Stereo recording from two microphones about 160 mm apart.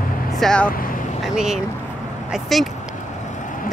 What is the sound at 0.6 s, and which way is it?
Speech, 60° left (ahead or behind).